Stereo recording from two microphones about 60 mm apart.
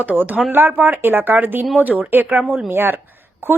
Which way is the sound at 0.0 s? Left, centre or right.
Right.